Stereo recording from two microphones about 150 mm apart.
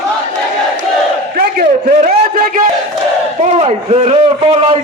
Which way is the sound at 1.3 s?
65° right (ahead or behind).